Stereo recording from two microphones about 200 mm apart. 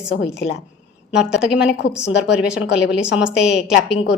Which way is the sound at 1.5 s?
60° left (ahead or behind).